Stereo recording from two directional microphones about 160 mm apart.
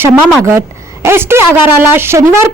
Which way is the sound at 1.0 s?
15° right (ahead or behind).